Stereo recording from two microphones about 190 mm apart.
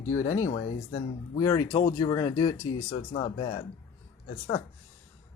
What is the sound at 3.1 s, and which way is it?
Speech, 35° left (ahead or behind).